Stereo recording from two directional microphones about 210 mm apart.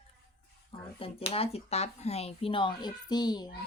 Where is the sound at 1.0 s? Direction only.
25° left (ahead or behind).